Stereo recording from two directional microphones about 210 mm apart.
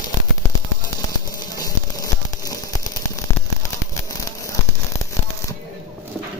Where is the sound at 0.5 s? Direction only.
20° left (ahead or behind).